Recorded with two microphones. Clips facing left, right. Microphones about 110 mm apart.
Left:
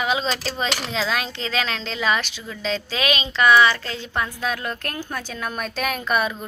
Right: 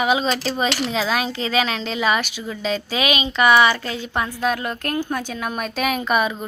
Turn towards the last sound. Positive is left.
turn(degrees=-5)  # may be behind; listen again after turning